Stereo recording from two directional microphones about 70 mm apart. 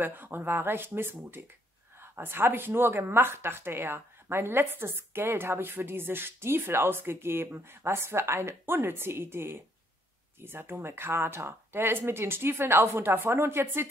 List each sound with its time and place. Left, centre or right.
0.0 s speech: right